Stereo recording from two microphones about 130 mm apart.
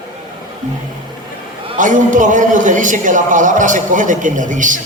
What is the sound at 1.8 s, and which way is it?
A man's voice, 80° right.